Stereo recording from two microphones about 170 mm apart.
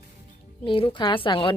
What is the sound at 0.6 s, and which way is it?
Speech, 30° left (ahead or behind).